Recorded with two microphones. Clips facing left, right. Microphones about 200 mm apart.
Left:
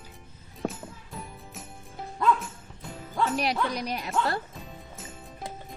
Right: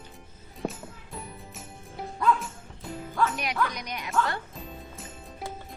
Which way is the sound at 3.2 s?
35° left (ahead or behind).